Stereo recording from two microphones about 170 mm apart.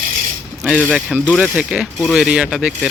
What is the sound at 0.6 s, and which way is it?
Speech, 5° right (ahead or behind).